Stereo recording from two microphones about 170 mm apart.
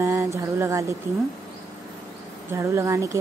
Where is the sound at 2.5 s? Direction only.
15° right (ahead or behind).